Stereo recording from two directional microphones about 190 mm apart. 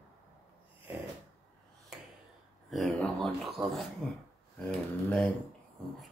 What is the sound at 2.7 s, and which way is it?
Speech, centre (ahead or behind).